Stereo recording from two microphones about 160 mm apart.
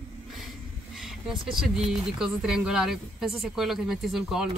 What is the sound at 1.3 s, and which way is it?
Speech, 30° right (ahead or behind).